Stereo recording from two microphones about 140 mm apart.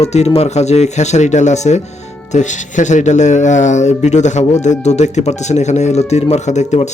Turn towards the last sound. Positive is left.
turn(degrees=55)  # may be behind; listen again after turning